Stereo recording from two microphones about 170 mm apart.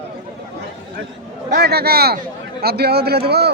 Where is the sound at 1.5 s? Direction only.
75° right (ahead or behind).